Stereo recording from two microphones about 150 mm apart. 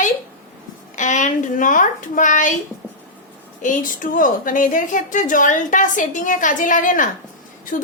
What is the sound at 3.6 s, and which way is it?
A woman's voice, 60° left (ahead or behind).